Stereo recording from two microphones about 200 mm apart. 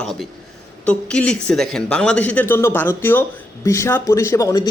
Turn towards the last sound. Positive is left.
turn(degrees=15)  # may be behind; listen again after turning